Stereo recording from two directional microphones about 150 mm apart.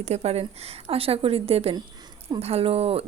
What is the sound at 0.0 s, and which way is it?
A woman's voice, 45° right (ahead or behind).